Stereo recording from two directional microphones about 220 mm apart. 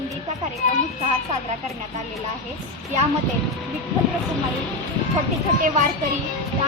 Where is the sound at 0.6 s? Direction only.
30° left (ahead or behind).